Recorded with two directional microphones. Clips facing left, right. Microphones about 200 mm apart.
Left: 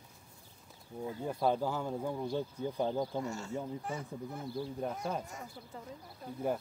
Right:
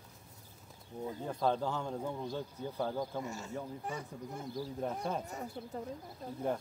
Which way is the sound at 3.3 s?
20° right (ahead or behind).